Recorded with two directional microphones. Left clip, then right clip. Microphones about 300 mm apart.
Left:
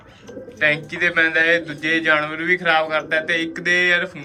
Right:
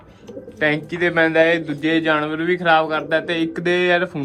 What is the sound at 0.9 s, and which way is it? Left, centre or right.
Speech, centre.